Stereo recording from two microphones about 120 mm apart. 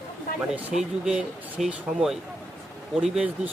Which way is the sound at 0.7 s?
5° right (ahead or behind).